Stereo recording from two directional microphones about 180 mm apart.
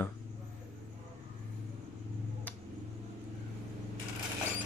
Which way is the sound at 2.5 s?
10° left (ahead or behind).